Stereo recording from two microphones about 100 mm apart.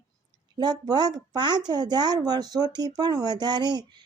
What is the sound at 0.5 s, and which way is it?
Speech, 45° right (ahead or behind).